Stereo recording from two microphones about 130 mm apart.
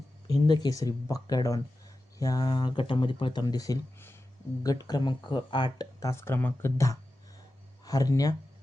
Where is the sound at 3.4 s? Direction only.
25° left (ahead or behind).